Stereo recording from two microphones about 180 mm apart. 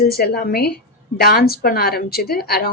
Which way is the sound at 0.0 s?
60° left (ahead or behind).